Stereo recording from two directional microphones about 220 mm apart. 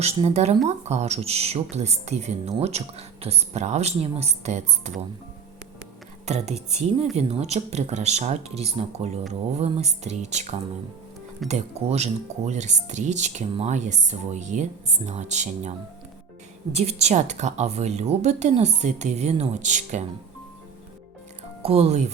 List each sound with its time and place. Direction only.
0.0 s speech: 30° right (ahead or behind)
6.2 s speech: 30° right (ahead or behind)
16.7 s speech: 30° right (ahead or behind)
21.6 s speech: 25° right (ahead or behind)